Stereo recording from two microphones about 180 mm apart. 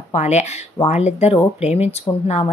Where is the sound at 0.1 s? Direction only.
40° left (ahead or behind).